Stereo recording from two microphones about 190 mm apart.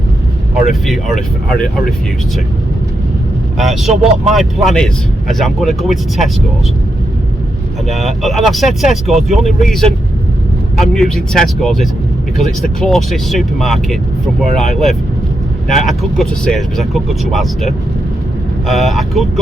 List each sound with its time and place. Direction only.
0.5 s speech: centre (ahead or behind)
3.6 s speech: centre (ahead or behind)
7.9 s speech: centre (ahead or behind)